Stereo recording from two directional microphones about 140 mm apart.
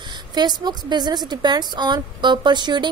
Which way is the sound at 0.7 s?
30° right (ahead or behind).